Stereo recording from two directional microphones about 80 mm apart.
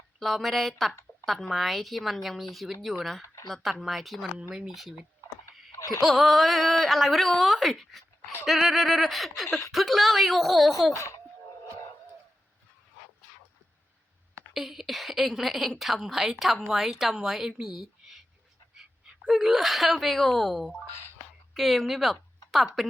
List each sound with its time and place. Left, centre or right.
0.2 s a woman's voice: centre
5.7 s a sound: left
6.0 s a woman's voice: centre
10.9 s speech: left
14.5 s a woman's voice: centre